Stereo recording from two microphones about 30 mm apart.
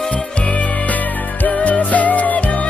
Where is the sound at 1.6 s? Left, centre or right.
Left.